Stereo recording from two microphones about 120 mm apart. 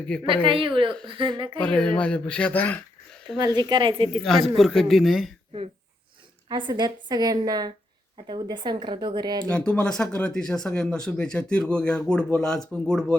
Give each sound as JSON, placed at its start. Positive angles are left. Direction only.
{"t": 0.1, "sound": "speech", "side_deg": 10}
{"t": 0.4, "sound": "speech", "side_deg": -45}
{"t": 1.6, "sound": "speech", "side_deg": 10}
{"t": 3.3, "sound": "a woman's voice", "side_deg": -35}
{"t": 4.2, "sound": "speech", "side_deg": 0}
{"t": 6.5, "sound": "a woman's voice", "side_deg": -40}
{"t": 9.5, "sound": "speech", "side_deg": 10}